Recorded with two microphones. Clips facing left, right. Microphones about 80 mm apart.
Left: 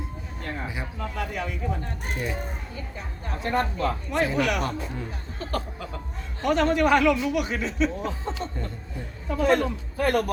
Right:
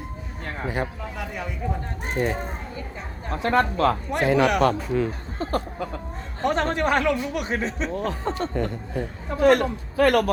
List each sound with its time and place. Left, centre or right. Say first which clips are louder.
1.3 s speech: left 1 dB; centre
2.1 s a man's voice: right 7 dB; right
3.4 s a man's voice: right 5 dB; right
4.2 s a man's voice: right 5 dB; right
5.4 s a man's voice: right 5 dB; right
7.9 s a man's voice: right 4 dB; right